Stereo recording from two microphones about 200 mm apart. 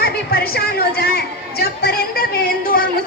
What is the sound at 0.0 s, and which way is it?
Chatter, 50° left (ahead or behind).